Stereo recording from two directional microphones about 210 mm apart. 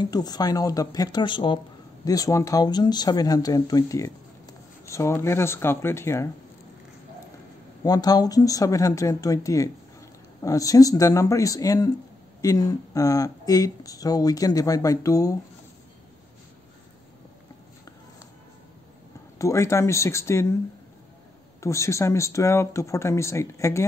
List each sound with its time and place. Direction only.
0.0 s speech: 20° left (ahead or behind)
7.8 s speech: 20° left (ahead or behind)
19.3 s speech: 15° left (ahead or behind)
21.5 s speech: 15° left (ahead or behind)